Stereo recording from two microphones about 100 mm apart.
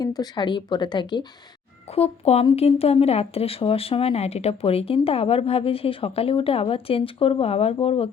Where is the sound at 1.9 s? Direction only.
90° left.